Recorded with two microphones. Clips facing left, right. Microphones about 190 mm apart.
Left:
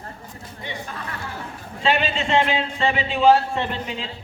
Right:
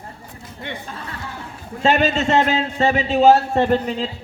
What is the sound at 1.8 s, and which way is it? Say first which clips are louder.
A man's voice: right 5 dB; 45° right (ahead or behind).